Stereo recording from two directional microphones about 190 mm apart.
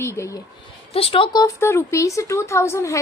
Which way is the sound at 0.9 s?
30° left (ahead or behind).